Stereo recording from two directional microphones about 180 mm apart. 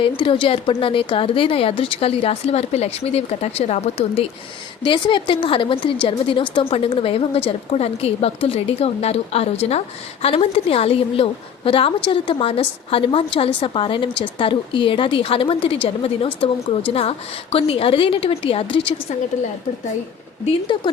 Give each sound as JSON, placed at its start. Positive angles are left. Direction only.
{"t": 0.2, "sound": "a woman's voice", "side_deg": 30}
{"t": 20.7, "sound": "a woman's voice", "side_deg": 25}